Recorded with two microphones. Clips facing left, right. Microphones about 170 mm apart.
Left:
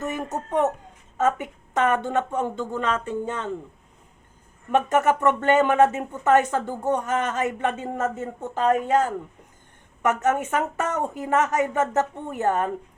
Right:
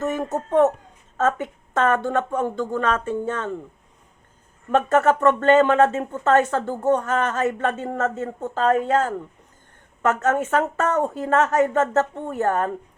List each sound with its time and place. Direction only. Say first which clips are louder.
0.0 s speech: right 4 dB; 15° left (ahead or behind)
4.7 s speech: right 2 dB; 15° left (ahead or behind)